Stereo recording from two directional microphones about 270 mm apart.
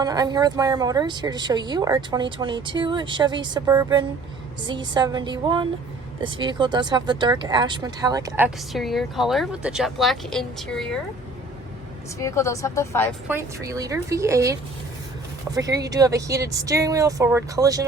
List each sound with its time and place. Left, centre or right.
0.0 s speech: centre
12.2 s speech: centre
13.2 s speech: centre